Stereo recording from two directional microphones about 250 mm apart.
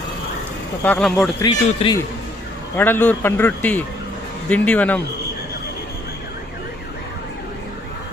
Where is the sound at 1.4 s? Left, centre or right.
Centre.